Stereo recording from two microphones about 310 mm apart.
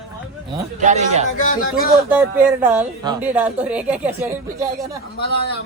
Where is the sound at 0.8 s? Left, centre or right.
Right.